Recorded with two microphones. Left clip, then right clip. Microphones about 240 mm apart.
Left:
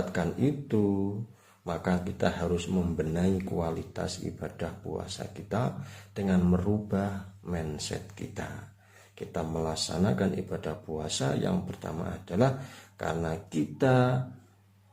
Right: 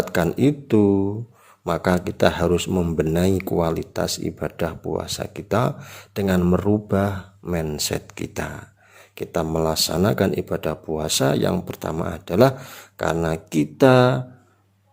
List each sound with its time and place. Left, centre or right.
0.1 s speech: right